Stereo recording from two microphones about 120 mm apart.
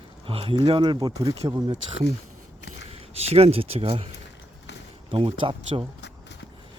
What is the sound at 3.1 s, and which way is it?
Speech, 60° right (ahead or behind).